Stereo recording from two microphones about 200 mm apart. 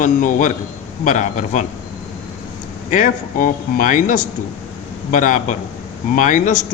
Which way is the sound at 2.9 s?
40° left (ahead or behind).